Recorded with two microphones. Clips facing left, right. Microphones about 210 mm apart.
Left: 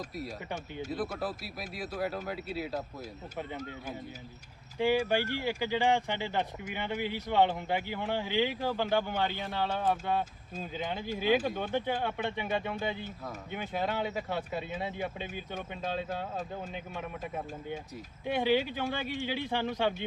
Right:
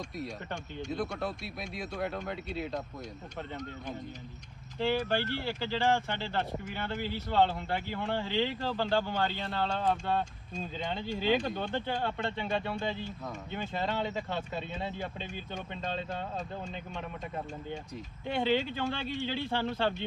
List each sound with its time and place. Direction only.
0.2 s speech: 5° left (ahead or behind)